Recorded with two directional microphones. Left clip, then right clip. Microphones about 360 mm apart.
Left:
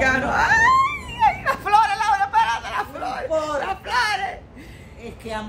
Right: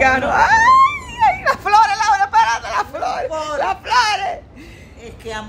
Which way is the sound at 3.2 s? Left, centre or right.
Centre.